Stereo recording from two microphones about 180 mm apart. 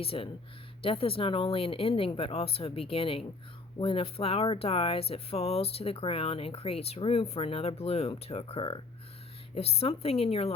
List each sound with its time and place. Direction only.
0.0 s speech: 30° left (ahead or behind)